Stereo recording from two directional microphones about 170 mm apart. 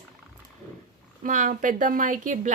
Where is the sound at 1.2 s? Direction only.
50° right (ahead or behind).